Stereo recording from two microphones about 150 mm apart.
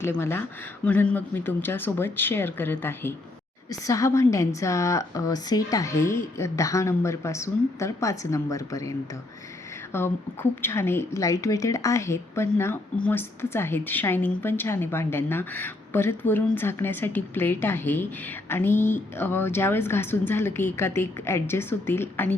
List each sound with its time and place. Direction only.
0.0 s a woman's voice: 15° left (ahead or behind)